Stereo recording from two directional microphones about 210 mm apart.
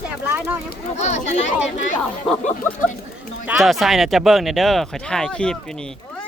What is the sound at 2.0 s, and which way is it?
Speech, 5° left (ahead or behind).